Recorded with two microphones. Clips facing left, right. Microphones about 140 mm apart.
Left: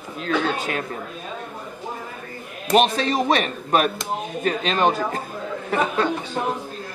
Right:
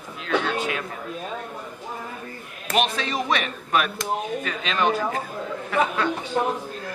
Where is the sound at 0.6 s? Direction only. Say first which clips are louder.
Left 1 dB; 45° left (ahead or behind).